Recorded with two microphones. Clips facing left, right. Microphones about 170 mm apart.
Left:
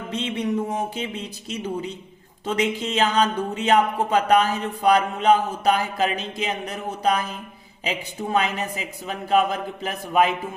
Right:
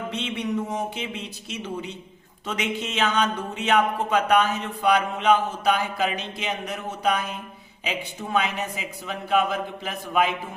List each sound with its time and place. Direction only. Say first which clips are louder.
0.1 s speech: left 5 dB; 35° left (ahead or behind)